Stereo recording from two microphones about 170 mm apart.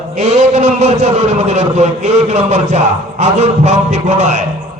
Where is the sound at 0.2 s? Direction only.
40° right (ahead or behind).